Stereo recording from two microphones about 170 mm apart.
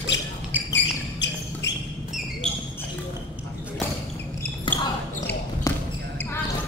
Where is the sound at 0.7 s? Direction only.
90° left.